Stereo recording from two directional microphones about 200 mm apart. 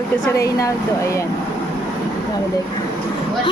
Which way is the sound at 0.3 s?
15° left (ahead or behind).